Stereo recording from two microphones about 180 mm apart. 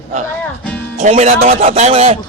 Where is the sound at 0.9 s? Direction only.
40° right (ahead or behind).